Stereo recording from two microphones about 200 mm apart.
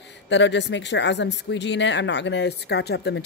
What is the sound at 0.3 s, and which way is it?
Speech, 65° left (ahead or behind).